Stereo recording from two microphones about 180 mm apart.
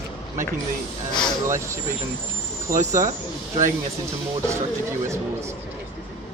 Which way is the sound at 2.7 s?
15° right (ahead or behind).